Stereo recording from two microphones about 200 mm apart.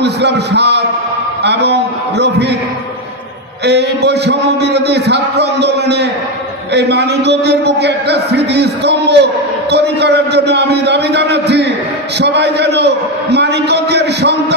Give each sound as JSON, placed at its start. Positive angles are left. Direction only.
{"t": 0.0, "sound": "a man's voice", "side_deg": -55}
{"t": 3.6, "sound": "a man's voice", "side_deg": -55}